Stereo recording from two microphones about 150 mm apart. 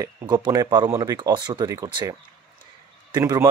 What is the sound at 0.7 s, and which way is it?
Speech, 20° right (ahead or behind).